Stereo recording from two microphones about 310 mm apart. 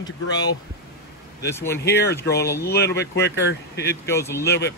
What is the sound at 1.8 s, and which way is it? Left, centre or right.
Speech, left.